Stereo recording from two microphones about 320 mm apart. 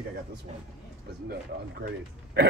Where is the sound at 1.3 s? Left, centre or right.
Right.